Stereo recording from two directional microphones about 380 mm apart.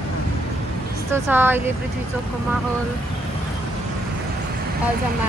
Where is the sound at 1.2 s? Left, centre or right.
Centre.